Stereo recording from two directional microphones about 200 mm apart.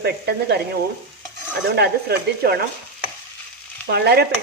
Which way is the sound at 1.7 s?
50° right (ahead or behind).